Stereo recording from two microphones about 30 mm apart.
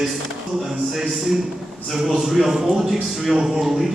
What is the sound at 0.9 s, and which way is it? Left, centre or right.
A man's voice, centre.